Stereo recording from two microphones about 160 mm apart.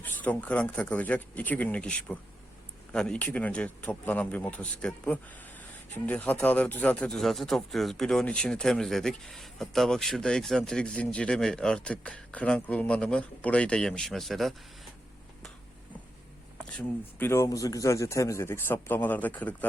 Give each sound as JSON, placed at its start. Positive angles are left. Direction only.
{"t": 0.0, "sound": "speech", "side_deg": 10}
{"t": 16.6, "sound": "speech", "side_deg": 10}